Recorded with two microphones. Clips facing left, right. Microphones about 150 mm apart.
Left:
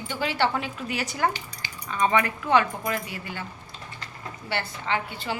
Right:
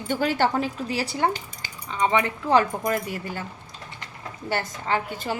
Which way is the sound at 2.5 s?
40° right (ahead or behind).